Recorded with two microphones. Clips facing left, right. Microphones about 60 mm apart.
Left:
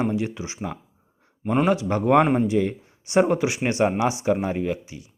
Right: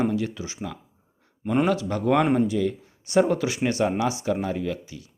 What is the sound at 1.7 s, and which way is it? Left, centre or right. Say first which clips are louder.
Speech: left 3 dB; left.